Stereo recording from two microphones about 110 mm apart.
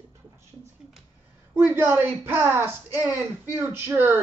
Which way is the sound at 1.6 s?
20° right (ahead or behind).